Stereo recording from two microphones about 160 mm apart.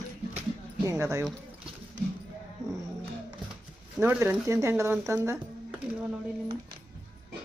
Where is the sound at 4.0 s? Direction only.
15° right (ahead or behind).